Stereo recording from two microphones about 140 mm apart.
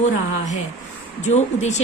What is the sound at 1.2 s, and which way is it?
Speech, 55° left (ahead or behind).